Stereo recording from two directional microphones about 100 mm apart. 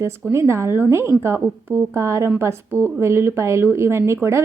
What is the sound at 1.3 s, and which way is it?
Speech, 10° right (ahead or behind).